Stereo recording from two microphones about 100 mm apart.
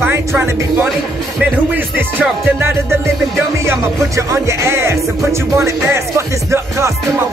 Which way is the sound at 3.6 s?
30° right (ahead or behind).